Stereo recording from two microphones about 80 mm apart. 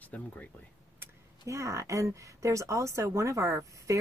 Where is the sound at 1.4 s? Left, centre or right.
Right.